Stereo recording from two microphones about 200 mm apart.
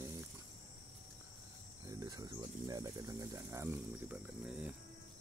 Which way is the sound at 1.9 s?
20° right (ahead or behind).